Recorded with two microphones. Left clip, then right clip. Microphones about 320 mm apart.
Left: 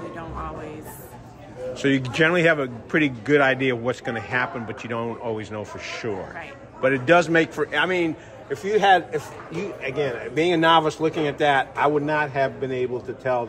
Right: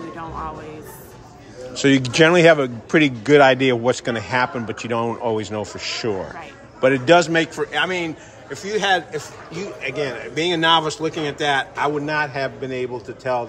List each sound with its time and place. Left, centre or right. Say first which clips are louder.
1.7 s a man's voice: right 5 dB; centre